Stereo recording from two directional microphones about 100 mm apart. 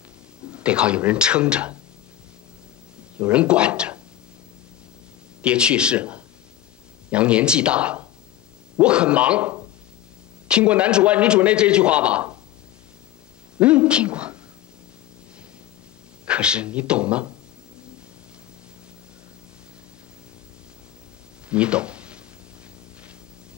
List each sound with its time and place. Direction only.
0.5 s a man's voice: 10° right (ahead or behind)
3.2 s a man's voice: 10° right (ahead or behind)
5.4 s a man's voice: 10° right (ahead or behind)
13.6 s a woman's voice: 10° right (ahead or behind)
16.3 s a man's voice: 10° right (ahead or behind)
21.5 s a sound: 10° right (ahead or behind)